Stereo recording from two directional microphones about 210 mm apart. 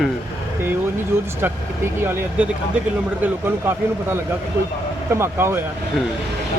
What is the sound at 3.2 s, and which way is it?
Speech, 10° right (ahead or behind).